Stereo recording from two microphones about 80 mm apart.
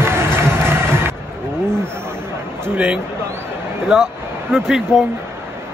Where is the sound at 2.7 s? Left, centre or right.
Centre.